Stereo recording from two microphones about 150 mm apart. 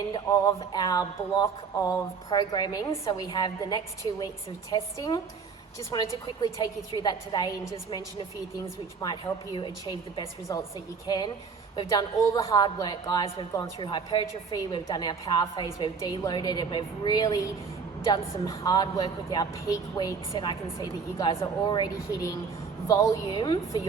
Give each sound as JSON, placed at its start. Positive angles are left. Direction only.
{"t": 0.1, "sound": "speech", "side_deg": 25}
{"t": 5.9, "sound": "a woman's voice", "side_deg": 30}